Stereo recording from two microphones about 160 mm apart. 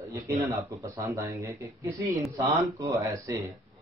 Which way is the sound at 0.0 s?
20° right (ahead or behind).